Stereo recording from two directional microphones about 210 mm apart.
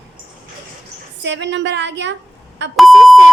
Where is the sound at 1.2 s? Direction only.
55° right (ahead or behind).